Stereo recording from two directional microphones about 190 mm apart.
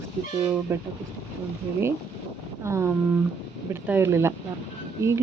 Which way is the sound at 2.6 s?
15° right (ahead or behind).